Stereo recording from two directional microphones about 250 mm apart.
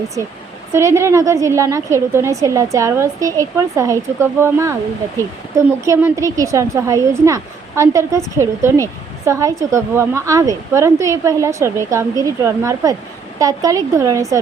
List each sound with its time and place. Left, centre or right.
0.7 s a woman's voice: centre